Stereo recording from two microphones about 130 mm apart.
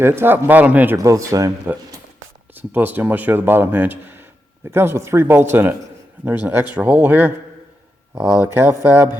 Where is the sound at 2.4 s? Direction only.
15° right (ahead or behind).